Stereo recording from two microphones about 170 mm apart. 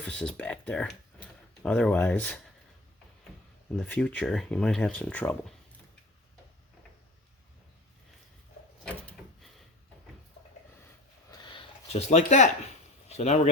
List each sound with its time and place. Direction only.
0.0 s speech: 5° left (ahead or behind)
3.8 s speech: 10° left (ahead or behind)
8.8 s drawer open or close: 5° left (ahead or behind)
11.3 s a sound: 25° left (ahead or behind)
11.9 s speech: 40° left (ahead or behind)